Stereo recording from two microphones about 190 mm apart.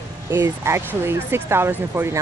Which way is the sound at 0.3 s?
15° right (ahead or behind).